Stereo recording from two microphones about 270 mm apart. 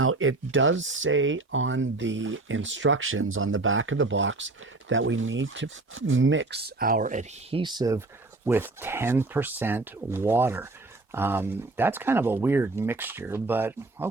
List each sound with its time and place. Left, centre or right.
0.0 s speech: right; by 14.1 s centre